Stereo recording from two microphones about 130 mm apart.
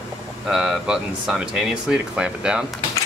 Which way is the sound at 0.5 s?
5° right (ahead or behind).